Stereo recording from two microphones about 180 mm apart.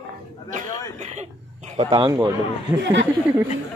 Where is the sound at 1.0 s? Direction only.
40° right (ahead or behind).